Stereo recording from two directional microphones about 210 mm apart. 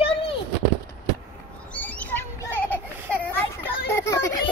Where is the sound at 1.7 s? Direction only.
10° left (ahead or behind).